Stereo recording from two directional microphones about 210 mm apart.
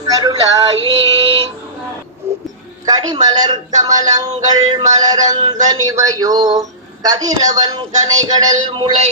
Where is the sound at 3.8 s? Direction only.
15° right (ahead or behind).